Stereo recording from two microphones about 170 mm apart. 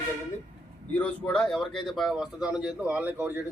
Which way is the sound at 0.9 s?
5° left (ahead or behind).